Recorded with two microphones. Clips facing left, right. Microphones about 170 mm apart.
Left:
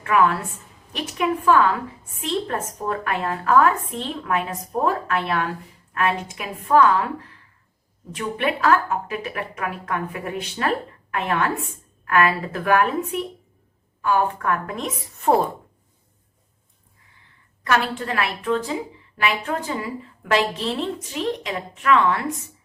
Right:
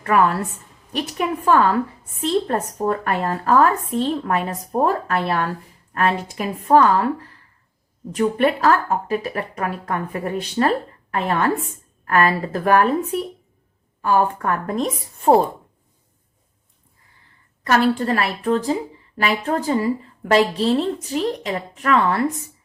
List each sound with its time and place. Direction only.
0.0 s a woman's voice: 40° right (ahead or behind)
8.1 s a woman's voice: 40° right (ahead or behind)
17.6 s a woman's voice: 40° right (ahead or behind)